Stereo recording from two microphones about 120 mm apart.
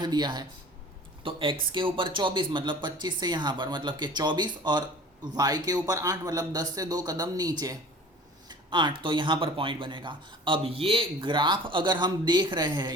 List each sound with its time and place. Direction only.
0.0 s speech: 35° right (ahead or behind)